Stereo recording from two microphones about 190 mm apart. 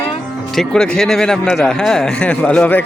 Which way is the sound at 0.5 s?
5° left (ahead or behind).